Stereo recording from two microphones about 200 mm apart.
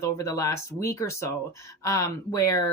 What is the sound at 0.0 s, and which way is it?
Speech, 15° left (ahead or behind).